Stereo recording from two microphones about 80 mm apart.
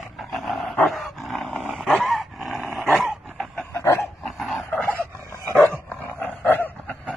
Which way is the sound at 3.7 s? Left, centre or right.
Left.